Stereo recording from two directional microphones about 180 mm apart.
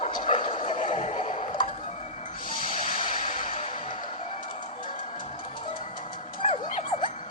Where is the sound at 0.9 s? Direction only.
40° left (ahead or behind).